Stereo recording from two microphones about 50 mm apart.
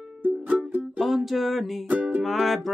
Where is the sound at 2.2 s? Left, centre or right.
Centre.